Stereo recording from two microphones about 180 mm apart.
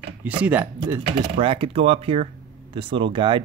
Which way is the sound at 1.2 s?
30° right (ahead or behind).